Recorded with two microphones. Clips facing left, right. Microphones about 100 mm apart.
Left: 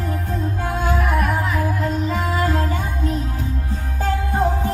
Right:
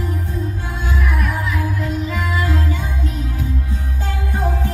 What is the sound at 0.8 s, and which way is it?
Music, 45° left (ahead or behind).